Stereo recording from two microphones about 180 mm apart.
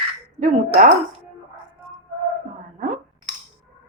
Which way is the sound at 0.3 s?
45° right (ahead or behind).